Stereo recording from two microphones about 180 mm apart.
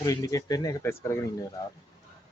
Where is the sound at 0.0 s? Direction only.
20° left (ahead or behind).